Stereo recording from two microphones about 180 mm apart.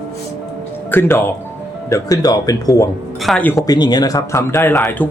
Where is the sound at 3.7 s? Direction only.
25° left (ahead or behind).